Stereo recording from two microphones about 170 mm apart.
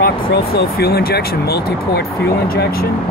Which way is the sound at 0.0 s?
70° left (ahead or behind).